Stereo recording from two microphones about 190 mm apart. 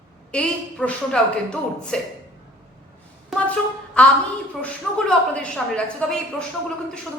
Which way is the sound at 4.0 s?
5° left (ahead or behind).